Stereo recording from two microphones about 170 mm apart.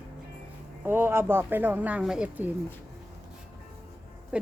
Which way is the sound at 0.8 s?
10° right (ahead or behind).